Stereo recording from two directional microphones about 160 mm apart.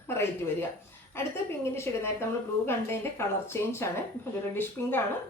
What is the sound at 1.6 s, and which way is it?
Speech, 15° left (ahead or behind).